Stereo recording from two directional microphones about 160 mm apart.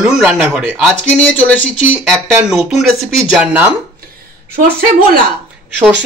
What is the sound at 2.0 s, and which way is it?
Speech, centre (ahead or behind).